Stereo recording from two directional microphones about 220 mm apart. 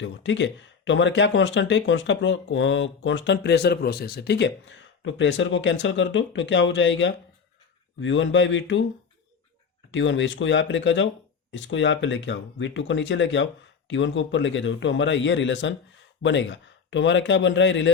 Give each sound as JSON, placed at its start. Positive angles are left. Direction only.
{"t": 0.0, "sound": "speech", "side_deg": 55}
{"t": 9.9, "sound": "speech", "side_deg": 55}